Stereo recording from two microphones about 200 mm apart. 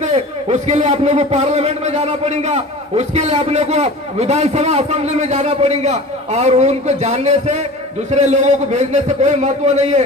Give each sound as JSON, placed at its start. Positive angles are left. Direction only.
{"t": 0.0, "sound": "a man's voice", "side_deg": -35}